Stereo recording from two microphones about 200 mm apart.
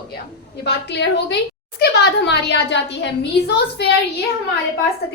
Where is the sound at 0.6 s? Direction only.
55° left (ahead or behind).